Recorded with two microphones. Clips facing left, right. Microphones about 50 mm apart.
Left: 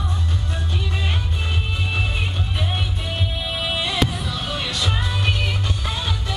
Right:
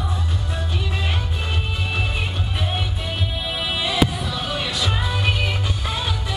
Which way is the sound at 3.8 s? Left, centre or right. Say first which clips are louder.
Right 5 dB; centre.